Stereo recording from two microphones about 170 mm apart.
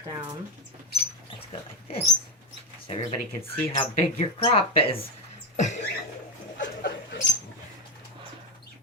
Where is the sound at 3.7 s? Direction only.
35° left (ahead or behind).